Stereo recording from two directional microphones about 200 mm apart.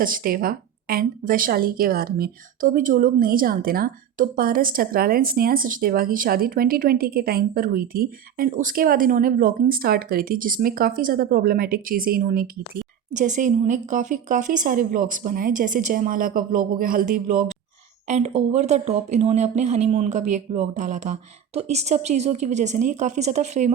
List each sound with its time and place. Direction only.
0.0 s a woman's voice: 45° right (ahead or behind)